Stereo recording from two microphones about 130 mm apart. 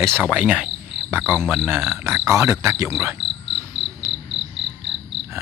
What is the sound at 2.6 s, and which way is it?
Speech, 20° right (ahead or behind).